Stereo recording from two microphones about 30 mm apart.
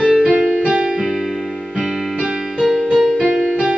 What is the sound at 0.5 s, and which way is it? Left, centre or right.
Music, right.